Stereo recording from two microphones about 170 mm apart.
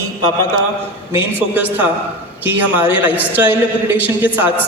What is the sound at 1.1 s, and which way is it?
A man's voice, 15° right (ahead or behind).